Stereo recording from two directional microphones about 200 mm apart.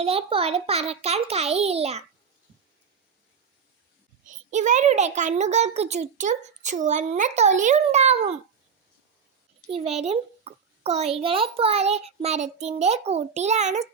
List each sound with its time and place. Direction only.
0.0 s a child's voice: 30° right (ahead or behind)
4.3 s a child's voice: 35° right (ahead or behind)
9.6 s a child's voice: 30° right (ahead or behind)